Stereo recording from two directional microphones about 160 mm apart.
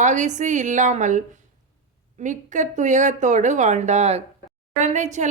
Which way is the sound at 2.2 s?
50° right (ahead or behind).